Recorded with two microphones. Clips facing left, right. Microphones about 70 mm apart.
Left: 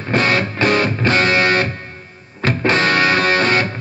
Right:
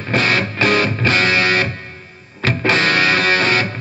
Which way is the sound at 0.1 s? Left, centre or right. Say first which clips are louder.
Left 1 dB; left.